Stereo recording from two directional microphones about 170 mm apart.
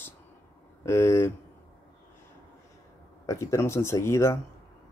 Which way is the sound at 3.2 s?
15° left (ahead or behind).